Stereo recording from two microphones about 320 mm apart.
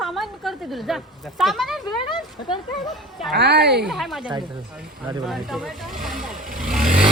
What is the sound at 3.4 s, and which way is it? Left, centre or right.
Speech, right.